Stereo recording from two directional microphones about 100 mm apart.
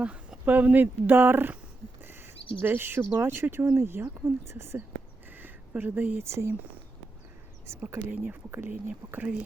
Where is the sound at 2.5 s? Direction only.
20° right (ahead or behind).